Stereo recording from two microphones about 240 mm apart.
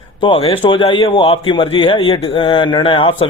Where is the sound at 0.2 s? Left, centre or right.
Left.